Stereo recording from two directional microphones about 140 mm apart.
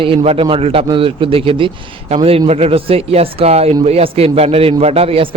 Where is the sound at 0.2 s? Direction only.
45° right (ahead or behind).